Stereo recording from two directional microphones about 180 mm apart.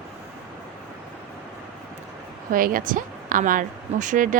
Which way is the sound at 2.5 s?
50° right (ahead or behind).